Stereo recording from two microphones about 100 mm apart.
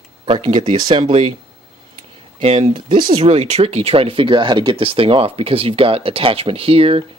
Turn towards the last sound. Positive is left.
turn(degrees=-70)  # may be behind; listen again after turning